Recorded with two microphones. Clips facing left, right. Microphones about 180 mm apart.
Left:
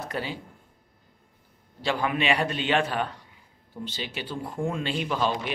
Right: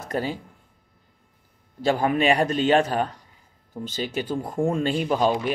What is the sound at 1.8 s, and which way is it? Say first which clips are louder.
Speech: right 5 dB; 45° right (ahead or behind).